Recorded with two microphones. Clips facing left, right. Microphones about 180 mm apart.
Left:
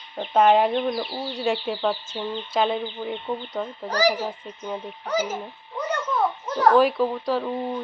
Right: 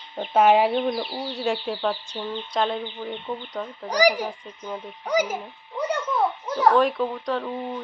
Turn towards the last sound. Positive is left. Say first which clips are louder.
# left 2 dB
turn(degrees=5)  # may be behind; listen again after turning